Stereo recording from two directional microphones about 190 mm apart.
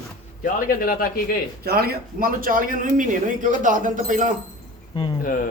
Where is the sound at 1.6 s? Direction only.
55° right (ahead or behind).